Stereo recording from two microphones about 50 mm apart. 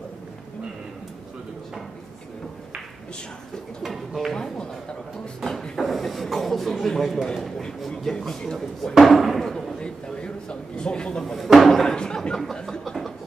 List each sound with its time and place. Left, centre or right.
3.8 s music: centre
5.4 s a sound: centre
8.0 s speech: centre
8.9 s speech: centre
9.8 s a man's voice: centre
11.3 s speech: centre
12.8 s a sound: centre